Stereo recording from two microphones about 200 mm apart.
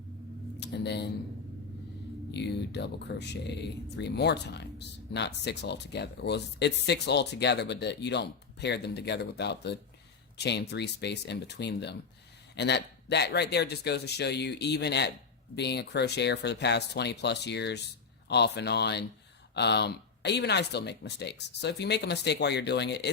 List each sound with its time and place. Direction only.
0.6 s speech: 55° left (ahead or behind)
2.3 s speech: 55° left (ahead or behind)